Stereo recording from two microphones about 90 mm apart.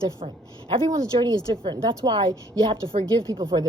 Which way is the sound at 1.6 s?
65° right (ahead or behind).